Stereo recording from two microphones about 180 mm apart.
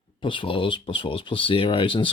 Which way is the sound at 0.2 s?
30° left (ahead or behind).